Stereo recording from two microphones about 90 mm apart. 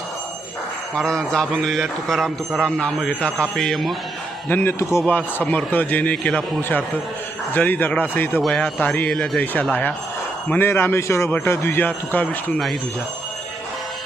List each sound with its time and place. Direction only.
0.9 s a man's voice: 5° left (ahead or behind)
4.4 s a man's voice: 25° left (ahead or behind)
10.5 s a man's voice: 25° left (ahead or behind)